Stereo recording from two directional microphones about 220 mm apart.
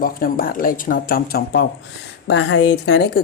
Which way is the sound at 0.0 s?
40° left (ahead or behind).